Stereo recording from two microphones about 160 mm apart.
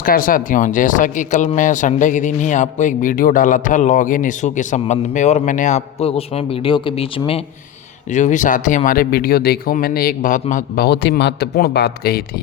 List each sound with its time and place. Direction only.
0.0 s speech: 65° left (ahead or behind); by 7.4 s 40° left (ahead or behind)
8.1 s speech: 50° left (ahead or behind)
10.8 s speech: 90° left